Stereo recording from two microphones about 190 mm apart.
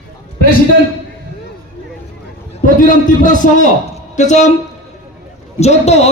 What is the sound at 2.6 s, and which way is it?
A man's voice, 45° left (ahead or behind).